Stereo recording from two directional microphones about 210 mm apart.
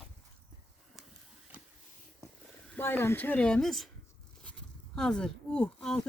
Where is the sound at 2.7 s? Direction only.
10° left (ahead or behind).